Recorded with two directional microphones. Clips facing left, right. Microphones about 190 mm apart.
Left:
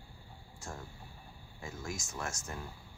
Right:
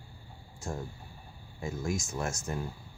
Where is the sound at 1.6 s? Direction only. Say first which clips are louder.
Right 8 dB; 20° right (ahead or behind).